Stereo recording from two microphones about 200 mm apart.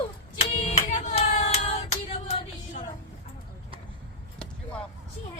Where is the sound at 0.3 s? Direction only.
30° left (ahead or behind).